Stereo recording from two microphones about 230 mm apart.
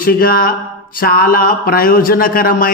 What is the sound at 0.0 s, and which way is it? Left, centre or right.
Mantra, left.